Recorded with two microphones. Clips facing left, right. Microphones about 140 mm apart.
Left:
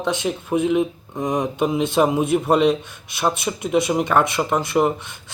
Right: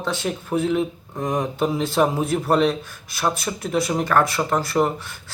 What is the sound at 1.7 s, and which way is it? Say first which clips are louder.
Speech: left 3 dB; 20° left (ahead or behind).